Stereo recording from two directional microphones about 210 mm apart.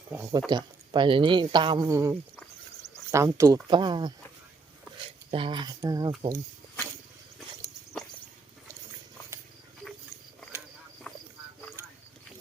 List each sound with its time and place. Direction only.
0.1 s speech: 15° right (ahead or behind)
2.8 s a sound: 15° right (ahead or behind)
3.7 s speech: 20° right (ahead or behind)